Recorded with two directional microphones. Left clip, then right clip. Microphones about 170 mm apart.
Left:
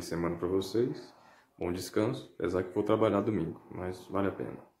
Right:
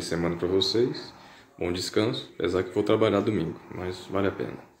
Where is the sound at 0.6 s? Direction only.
15° left (ahead or behind).